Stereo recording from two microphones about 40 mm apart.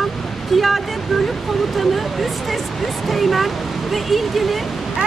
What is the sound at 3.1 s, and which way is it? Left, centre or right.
Speech, centre.